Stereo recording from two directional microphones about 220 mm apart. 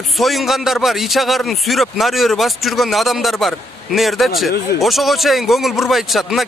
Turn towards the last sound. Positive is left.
turn(degrees=0)  # may be behind; listen again after turning